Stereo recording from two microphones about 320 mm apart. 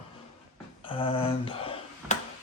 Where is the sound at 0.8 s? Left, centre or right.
Centre.